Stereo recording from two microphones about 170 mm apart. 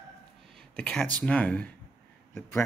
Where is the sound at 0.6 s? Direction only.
5° left (ahead or behind).